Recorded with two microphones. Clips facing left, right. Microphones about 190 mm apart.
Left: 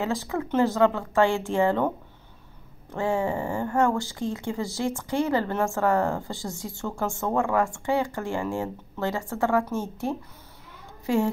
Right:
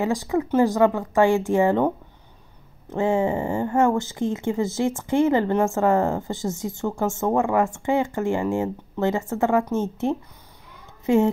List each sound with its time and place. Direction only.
0.0 s speech: 15° right (ahead or behind)
2.9 s speech: 20° right (ahead or behind)